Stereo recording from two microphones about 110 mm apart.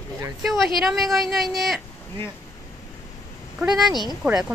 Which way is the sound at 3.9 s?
40° left (ahead or behind).